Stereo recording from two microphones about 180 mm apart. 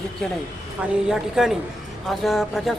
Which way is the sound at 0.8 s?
5° right (ahead or behind).